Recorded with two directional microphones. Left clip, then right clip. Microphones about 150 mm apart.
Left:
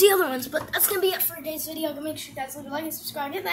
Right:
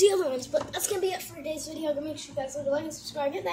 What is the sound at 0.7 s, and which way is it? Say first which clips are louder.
Speech: left 5 dB; 20° left (ahead or behind).